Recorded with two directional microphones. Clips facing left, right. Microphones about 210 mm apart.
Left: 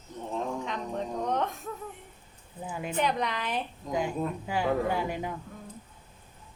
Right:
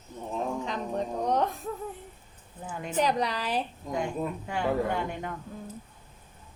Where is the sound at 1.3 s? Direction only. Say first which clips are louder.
Right 4 dB; 35° right (ahead or behind).